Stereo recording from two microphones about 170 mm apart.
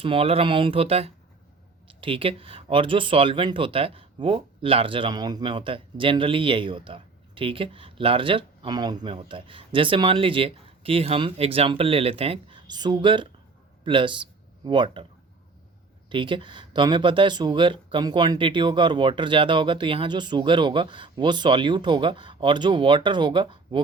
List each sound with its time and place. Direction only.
0.0 s speech: 30° right (ahead or behind)
16.0 s speech: 30° right (ahead or behind)